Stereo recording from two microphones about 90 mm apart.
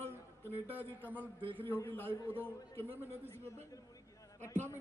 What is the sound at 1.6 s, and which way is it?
A man's voice, 25° left (ahead or behind).